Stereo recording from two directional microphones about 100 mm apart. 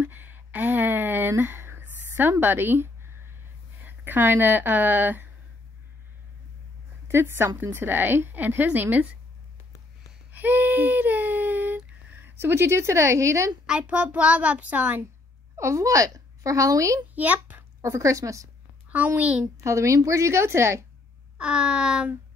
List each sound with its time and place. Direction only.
0.0 s a sound: 20° right (ahead or behind)
2.4 s a woman's voice: 20° right (ahead or behind)
7.1 s a woman's voice: 25° right (ahead or behind)
10.3 s speech: 20° right (ahead or behind)
13.7 s a child's voice: 10° right (ahead or behind)
15.5 s a woman's voice: 30° right (ahead or behind)
17.1 s a child's voice: 15° right (ahead or behind)
17.8 s a woman's voice: 30° right (ahead or behind)
18.9 s a child's voice: 15° right (ahead or behind)
19.4 s a woman's voice: 30° right (ahead or behind)
21.4 s a child's voice: 10° right (ahead or behind)